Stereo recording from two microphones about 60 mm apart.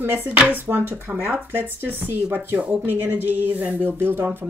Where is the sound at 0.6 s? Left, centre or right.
Right.